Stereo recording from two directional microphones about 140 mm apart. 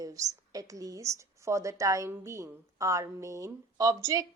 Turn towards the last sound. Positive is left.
turn(degrees=-25)  # may be behind; listen again after turning